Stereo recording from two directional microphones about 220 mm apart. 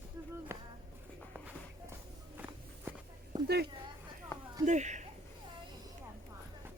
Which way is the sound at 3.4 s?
45° right (ahead or behind).